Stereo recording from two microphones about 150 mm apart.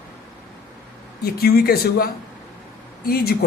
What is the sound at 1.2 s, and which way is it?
Speech, 90° left.